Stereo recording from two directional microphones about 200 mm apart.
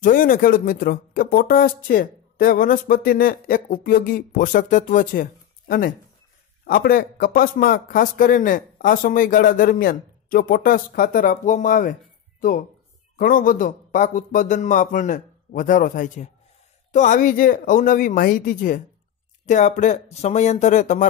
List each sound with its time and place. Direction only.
0.0 s speech: 45° left (ahead or behind)